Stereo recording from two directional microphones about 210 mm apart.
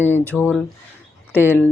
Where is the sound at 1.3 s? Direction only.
10° right (ahead or behind).